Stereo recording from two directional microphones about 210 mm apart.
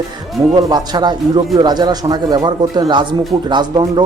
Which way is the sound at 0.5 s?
20° right (ahead or behind).